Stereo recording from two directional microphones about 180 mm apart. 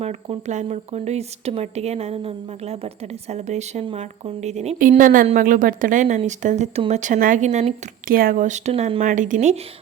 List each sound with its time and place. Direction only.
0.0 s a woman's voice: 35° right (ahead or behind)
9.0 s a woman's voice: 45° right (ahead or behind)